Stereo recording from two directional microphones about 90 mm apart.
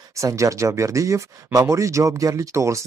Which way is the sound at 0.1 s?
35° right (ahead or behind).